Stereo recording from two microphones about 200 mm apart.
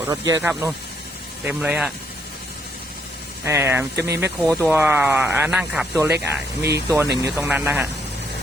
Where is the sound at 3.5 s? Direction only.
10° right (ahead or behind).